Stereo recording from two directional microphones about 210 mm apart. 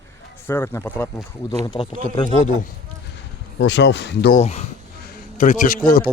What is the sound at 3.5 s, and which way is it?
Speech, 55° left (ahead or behind).